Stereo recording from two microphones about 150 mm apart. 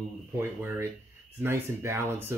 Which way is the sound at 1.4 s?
20° right (ahead or behind).